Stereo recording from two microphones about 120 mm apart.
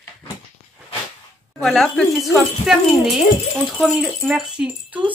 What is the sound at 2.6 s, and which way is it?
Speech, 80° left.